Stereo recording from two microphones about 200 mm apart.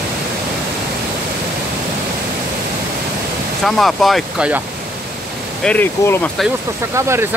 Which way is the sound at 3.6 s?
Centre (ahead or behind).